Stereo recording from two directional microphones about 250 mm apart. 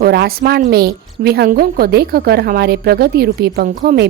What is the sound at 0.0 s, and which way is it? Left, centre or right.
A woman's voice, right.